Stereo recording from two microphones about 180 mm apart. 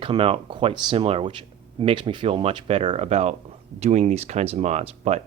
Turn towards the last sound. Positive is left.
turn(degrees=-35)  # may be behind; listen again after turning